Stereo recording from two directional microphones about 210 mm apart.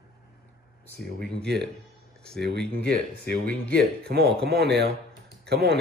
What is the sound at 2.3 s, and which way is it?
Speech, 50° right (ahead or behind).